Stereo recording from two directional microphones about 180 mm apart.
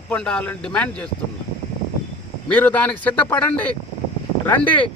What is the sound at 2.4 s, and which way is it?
Speech, 10° left (ahead or behind).